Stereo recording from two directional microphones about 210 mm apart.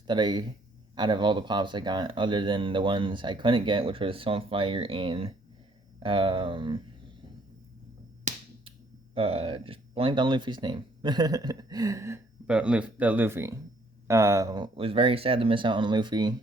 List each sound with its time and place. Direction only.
0.1 s speech: 20° right (ahead or behind)
8.3 s finger snapping: 35° right (ahead or behind)
9.1 s speech: 25° right (ahead or behind)